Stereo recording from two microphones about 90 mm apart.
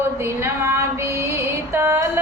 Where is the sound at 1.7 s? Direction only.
30° right (ahead or behind).